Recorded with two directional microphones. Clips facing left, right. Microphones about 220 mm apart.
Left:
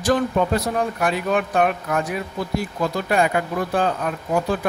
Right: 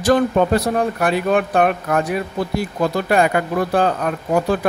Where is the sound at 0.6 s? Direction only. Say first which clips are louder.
Right 3 dB; 45° right (ahead or behind).